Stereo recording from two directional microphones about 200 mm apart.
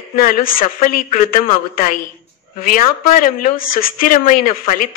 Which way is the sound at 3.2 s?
45° left (ahead or behind).